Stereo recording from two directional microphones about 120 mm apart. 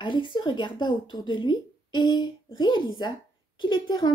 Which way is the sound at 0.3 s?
40° left (ahead or behind).